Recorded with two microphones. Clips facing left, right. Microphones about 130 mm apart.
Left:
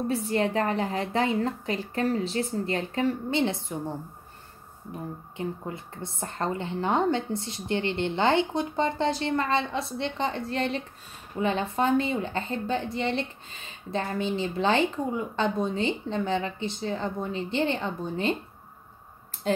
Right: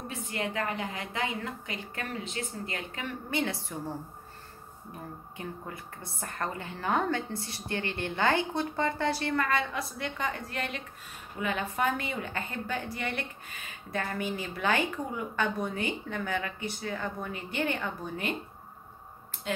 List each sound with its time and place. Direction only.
0.1 s a woman's voice: 35° left (ahead or behind)
5.4 s a woman's voice: 25° left (ahead or behind)
19.4 s a sound: 35° left (ahead or behind)